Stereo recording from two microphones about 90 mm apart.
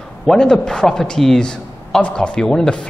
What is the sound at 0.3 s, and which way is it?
A man's voice, 5° left (ahead or behind).